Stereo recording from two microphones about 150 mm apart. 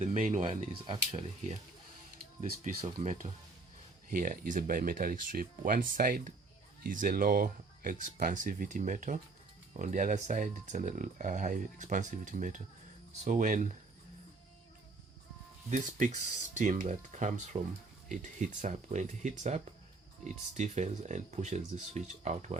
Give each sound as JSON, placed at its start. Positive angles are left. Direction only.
{"t": 0.0, "sound": "speech", "side_deg": -55}
{"t": 0.9, "sound": "speech", "side_deg": -40}
{"t": 2.4, "sound": "speech", "side_deg": -55}
{"t": 4.1, "sound": "speech", "side_deg": -65}
{"t": 15.7, "sound": "speech", "side_deg": -55}